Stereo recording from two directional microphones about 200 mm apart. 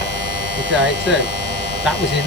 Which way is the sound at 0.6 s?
65° right (ahead or behind).